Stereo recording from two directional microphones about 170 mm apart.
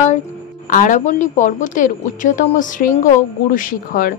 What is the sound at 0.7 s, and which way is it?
A woman's voice, 50° left (ahead or behind).